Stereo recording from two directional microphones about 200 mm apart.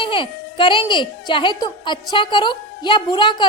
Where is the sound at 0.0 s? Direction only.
25° left (ahead or behind).